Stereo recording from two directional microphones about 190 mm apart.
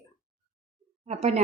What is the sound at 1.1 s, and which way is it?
Speech, 35° right (ahead or behind).